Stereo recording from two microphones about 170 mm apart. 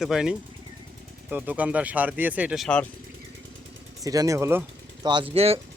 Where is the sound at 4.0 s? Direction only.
20° right (ahead or behind).